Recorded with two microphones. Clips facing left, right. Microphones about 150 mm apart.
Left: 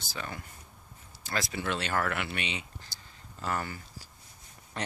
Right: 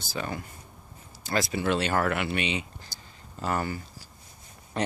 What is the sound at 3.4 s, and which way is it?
Speech, 20° right (ahead or behind).